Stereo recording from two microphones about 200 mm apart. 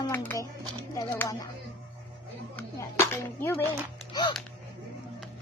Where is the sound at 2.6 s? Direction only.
10° left (ahead or behind).